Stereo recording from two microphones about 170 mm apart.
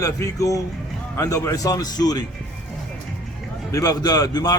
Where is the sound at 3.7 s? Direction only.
20° left (ahead or behind).